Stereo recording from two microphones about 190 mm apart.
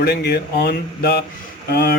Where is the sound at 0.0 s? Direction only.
60° left (ahead or behind).